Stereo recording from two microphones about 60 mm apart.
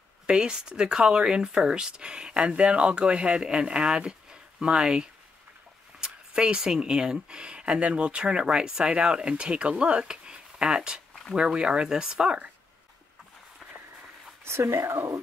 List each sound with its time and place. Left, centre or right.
0.3 s speech: centre
14.4 s speech: right